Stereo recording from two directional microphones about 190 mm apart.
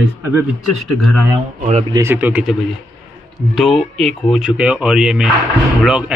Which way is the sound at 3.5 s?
Centre (ahead or behind).